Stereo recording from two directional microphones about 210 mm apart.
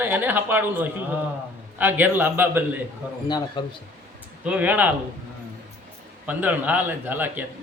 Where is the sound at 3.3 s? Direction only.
20° left (ahead or behind).